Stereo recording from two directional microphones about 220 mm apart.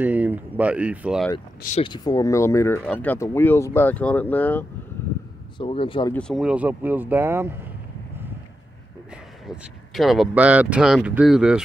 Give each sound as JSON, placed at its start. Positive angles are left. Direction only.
{"t": 0.0, "sound": "speech", "side_deg": -5}
{"t": 1.8, "sound": "speech", "side_deg": 20}
{"t": 5.6, "sound": "speech", "side_deg": 25}
{"t": 6.1, "sound": "speech", "side_deg": 0}
{"t": 9.1, "sound": "speech", "side_deg": -5}